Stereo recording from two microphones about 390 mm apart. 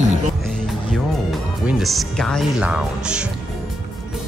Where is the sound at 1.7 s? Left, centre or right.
Centre.